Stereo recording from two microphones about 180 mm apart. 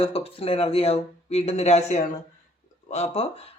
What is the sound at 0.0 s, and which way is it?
Speech, 30° left (ahead or behind).